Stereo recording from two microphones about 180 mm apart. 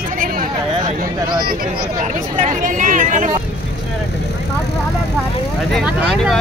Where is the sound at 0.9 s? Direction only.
55° right (ahead or behind).